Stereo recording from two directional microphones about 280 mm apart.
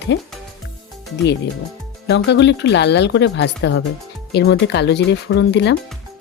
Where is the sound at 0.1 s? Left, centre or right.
Left.